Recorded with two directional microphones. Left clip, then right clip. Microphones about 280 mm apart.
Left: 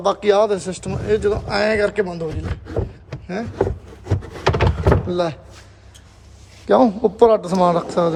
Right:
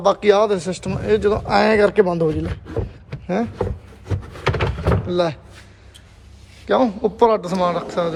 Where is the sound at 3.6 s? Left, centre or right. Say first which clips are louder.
Left 4 dB; left.